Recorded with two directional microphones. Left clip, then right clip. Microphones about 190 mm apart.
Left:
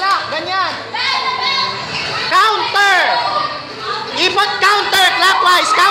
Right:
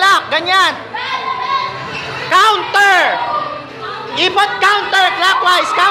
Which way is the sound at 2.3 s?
15° right (ahead or behind).